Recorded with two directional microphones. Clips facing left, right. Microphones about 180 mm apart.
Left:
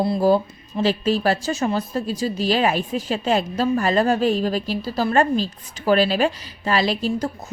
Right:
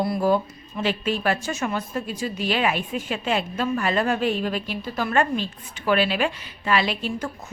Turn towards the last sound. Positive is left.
turn(degrees=35)  # may be behind; listen again after turning